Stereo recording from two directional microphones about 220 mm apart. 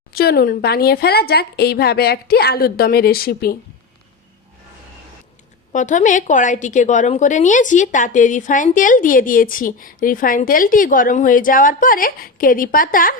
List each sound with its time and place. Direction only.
0.1 s a woman's voice: 45° left (ahead or behind)
5.7 s a woman's voice: 35° left (ahead or behind)